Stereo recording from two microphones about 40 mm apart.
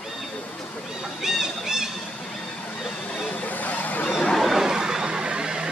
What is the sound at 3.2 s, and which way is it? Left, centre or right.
Vehicle, left.